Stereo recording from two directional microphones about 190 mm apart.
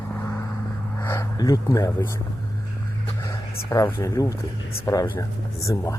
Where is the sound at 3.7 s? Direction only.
15° left (ahead or behind).